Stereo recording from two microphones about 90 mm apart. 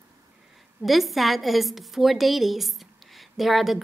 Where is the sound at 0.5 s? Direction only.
Centre (ahead or behind).